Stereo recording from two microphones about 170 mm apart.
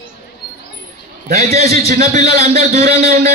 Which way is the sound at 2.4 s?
40° right (ahead or behind).